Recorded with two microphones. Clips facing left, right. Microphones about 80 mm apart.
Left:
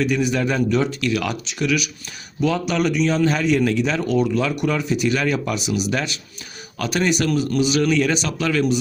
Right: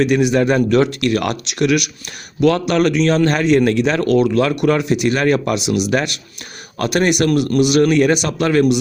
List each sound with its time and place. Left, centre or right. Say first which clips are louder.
0.0 s a man's voice: right 6 dB; right
1.1 s a man's voice: right 4 dB; right
6.7 s speech: right 5 dB; right